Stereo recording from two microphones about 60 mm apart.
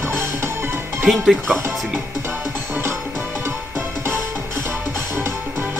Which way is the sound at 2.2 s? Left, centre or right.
Right.